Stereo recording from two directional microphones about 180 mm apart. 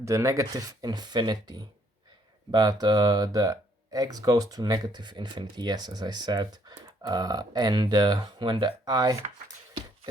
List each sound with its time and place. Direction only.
0.0 s speech: 15° right (ahead or behind)